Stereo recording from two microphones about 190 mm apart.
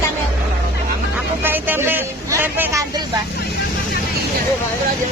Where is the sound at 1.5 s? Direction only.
10° right (ahead or behind).